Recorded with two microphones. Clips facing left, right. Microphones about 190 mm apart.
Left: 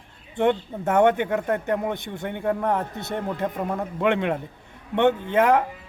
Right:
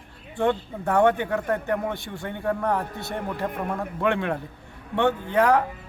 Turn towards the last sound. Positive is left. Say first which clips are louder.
# left 1 dB
turn(degrees=20)  # may be behind; listen again after turning